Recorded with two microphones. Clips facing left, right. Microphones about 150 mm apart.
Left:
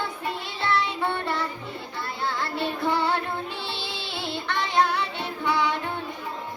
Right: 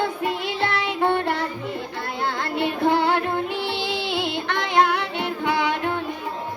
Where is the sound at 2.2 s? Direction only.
60° right (ahead or behind).